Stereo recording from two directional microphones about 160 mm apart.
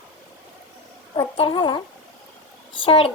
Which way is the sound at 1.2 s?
30° left (ahead or behind).